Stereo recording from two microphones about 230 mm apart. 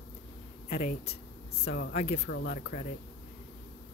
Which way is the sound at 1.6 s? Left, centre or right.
Left.